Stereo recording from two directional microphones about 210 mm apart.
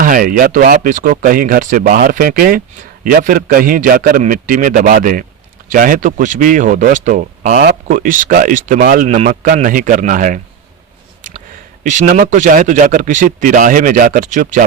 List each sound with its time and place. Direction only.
0.0 s speech: 40° right (ahead or behind)
11.8 s speech: 35° right (ahead or behind)